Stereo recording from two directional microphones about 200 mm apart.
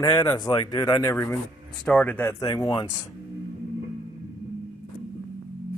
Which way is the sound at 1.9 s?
5° left (ahead or behind).